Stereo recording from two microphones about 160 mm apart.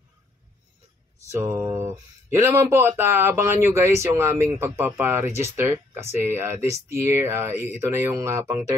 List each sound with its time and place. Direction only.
1.3 s speech: 15° right (ahead or behind)